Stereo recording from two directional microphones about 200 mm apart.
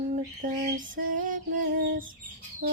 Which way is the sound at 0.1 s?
45° right (ahead or behind).